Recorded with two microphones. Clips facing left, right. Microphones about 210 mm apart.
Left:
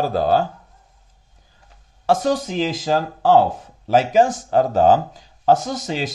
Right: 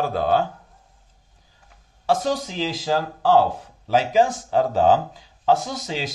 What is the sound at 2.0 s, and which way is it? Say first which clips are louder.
Speech: left 3 dB; 50° left (ahead or behind).